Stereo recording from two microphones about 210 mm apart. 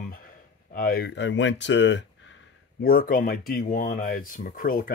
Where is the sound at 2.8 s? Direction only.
45° left (ahead or behind).